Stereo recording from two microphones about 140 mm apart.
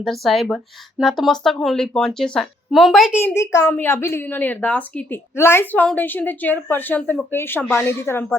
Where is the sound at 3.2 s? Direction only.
20° left (ahead or behind).